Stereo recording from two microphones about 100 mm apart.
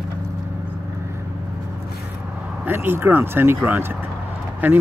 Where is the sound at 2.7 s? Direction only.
20° right (ahead or behind).